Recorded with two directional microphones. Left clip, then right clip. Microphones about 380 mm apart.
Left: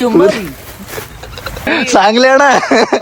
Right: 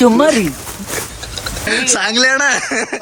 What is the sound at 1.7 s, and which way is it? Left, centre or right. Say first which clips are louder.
Speech: left 6 dB; centre.